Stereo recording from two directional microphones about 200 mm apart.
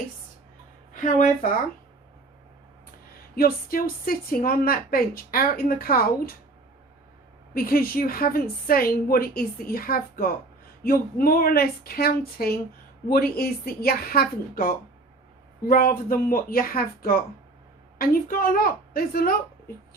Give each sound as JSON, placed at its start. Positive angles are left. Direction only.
{"t": 0.9, "sound": "a woman's voice", "side_deg": 40}
{"t": 3.3, "sound": "a woman's voice", "side_deg": 45}
{"t": 7.5, "sound": "a woman's voice", "side_deg": 50}